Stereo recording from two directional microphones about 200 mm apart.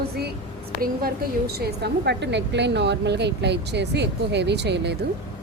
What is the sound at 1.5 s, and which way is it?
A woman's voice, 55° right (ahead or behind).